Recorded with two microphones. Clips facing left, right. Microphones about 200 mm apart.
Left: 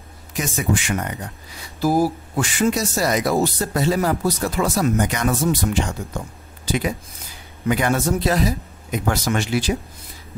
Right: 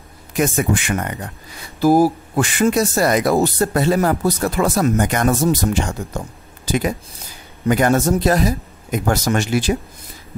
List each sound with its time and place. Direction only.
0.3 s speech: 55° right (ahead or behind)